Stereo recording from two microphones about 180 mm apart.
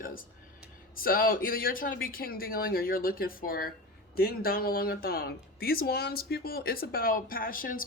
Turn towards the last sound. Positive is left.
turn(degrees=50)  # may be behind; listen again after turning